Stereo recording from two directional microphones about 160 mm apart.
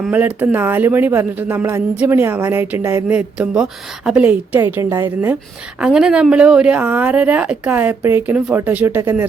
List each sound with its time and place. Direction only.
0.1 s speech: 10° right (ahead or behind)
4.6 s a woman's voice: 20° right (ahead or behind)
5.8 s speech: 5° right (ahead or behind)